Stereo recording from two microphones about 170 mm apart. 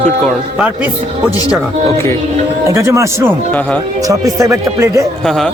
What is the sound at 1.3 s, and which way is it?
Speech, 20° left (ahead or behind).